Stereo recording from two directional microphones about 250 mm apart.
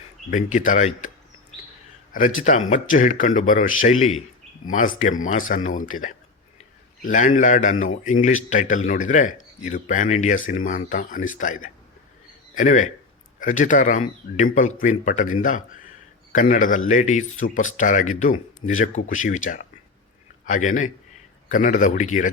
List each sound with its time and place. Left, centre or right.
0.3 s speech: left
2.6 s speech: left
4.9 s speech: left
7.0 s speech: left